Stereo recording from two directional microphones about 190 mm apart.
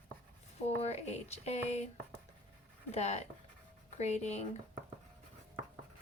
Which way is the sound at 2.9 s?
35° left (ahead or behind).